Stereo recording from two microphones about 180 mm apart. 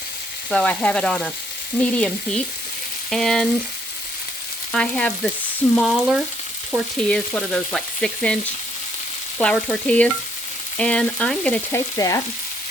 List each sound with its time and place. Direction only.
0.5 s frying: 5° left (ahead or behind)
4.7 s frying: 5° left (ahead or behind)
6.7 s frying: 15° right (ahead or behind)
7.1 s frying: 5° left (ahead or behind)
9.4 s frying: 5° left (ahead or behind)
11.9 s frying: 20° left (ahead or behind)